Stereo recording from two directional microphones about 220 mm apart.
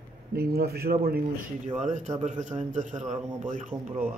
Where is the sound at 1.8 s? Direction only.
30° right (ahead or behind).